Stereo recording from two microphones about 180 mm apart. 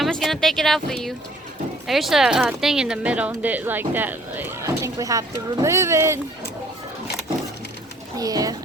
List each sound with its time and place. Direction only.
0.0 s speech: centre (ahead or behind); by 6.1 s 15° right (ahead or behind)
8.2 s speech: 20° right (ahead or behind)